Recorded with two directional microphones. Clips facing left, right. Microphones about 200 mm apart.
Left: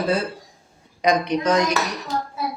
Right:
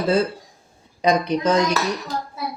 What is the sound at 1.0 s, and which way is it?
Speech, 30° right (ahead or behind).